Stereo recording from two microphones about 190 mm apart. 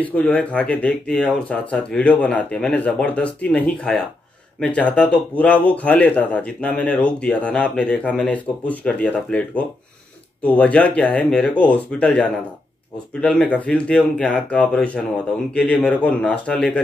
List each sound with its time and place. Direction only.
0.0 s speech: 5° left (ahead or behind)